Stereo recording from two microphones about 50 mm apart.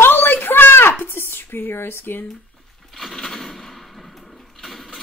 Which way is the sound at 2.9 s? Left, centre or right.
Centre.